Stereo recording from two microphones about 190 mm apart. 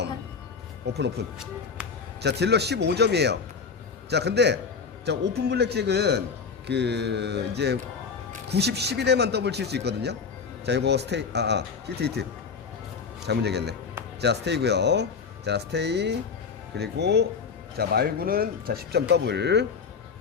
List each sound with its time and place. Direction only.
1.2 s speech: 60° right (ahead or behind)
13.2 s speech: 60° right (ahead or behind)